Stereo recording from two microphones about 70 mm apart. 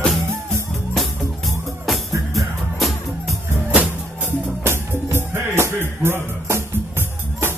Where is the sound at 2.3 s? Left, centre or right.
Centre.